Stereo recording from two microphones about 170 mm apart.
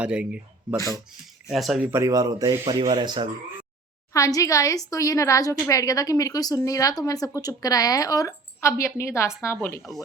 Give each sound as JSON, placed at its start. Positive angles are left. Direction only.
{"t": 0.0, "sound": "speech", "side_deg": -5}
{"t": 1.9, "sound": "speech", "side_deg": -20}
{"t": 4.1, "sound": "speech", "side_deg": 20}